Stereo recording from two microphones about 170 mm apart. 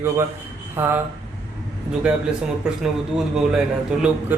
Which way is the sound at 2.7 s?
5° right (ahead or behind).